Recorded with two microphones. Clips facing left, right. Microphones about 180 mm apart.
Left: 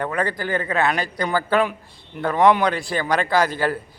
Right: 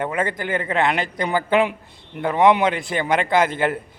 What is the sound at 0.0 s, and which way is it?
A man's voice, 20° right (ahead or behind).